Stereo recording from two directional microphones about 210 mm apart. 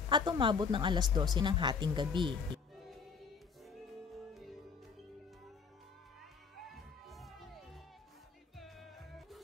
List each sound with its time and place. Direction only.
0.1 s speech: 20° right (ahead or behind)
3.6 s music: centre (ahead or behind)
6.7 s music: centre (ahead or behind)